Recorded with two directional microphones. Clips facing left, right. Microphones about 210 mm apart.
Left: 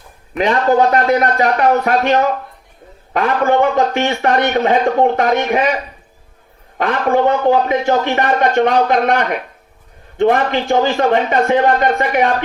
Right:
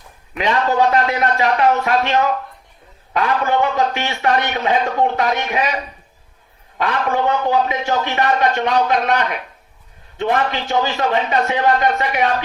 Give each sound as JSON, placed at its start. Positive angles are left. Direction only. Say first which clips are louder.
{"t": 0.3, "sound": "a man's voice", "louder": "left 4 dB", "side_deg": 45}
{"t": 6.7, "sound": "a man's voice", "louder": "left 5 dB", "side_deg": 50}